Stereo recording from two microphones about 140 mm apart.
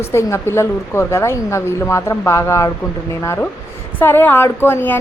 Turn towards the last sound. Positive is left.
turn(degrees=15)  # may be behind; listen again after turning